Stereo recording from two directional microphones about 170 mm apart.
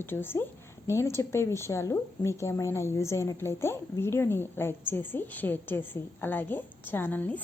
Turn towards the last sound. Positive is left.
turn(degrees=10)  # may be behind; listen again after turning